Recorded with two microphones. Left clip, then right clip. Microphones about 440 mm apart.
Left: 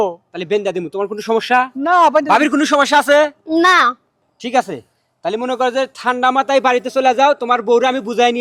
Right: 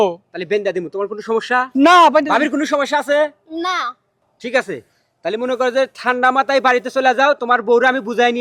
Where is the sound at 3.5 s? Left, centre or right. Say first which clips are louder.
Left 10 dB; left.